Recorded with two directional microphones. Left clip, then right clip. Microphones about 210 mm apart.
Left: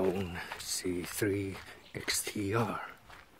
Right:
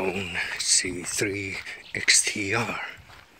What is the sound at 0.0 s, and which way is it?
Speech, 20° left (ahead or behind).